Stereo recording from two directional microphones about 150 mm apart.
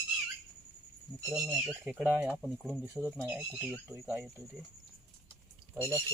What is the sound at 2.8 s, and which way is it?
Speech, 10° right (ahead or behind).